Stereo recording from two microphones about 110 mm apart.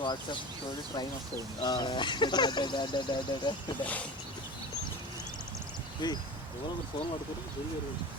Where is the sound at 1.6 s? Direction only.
45° left (ahead or behind).